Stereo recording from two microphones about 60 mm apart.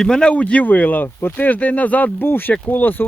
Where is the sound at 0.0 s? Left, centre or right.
Centre.